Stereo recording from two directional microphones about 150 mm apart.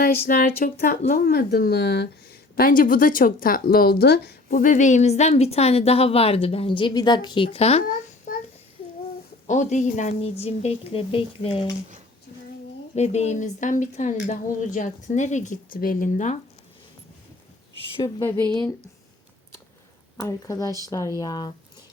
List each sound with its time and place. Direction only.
0.0 s speech: 75° left (ahead or behind)
2.6 s speech: 70° left (ahead or behind); by 8.3 s 45° left (ahead or behind)
9.5 s speech: 50° left (ahead or behind); by 11.7 s 35° left (ahead or behind)
13.0 s a woman's voice: 45° left (ahead or behind)
18.3 s speech: 25° right (ahead or behind)
20.1 s speech: 20° left (ahead or behind)